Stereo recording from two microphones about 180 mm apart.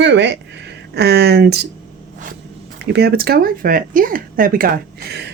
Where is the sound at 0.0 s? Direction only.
75° right (ahead or behind).